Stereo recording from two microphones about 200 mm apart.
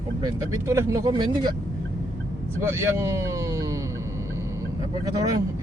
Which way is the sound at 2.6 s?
15° right (ahead or behind).